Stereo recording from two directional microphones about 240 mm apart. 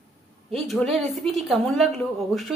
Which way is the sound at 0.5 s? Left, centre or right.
Centre.